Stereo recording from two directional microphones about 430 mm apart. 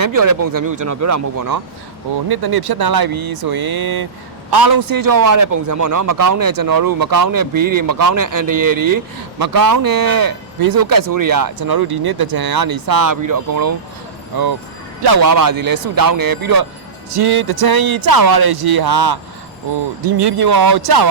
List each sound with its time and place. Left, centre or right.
0.0 s a man's voice: right
15.0 s a man's voice: right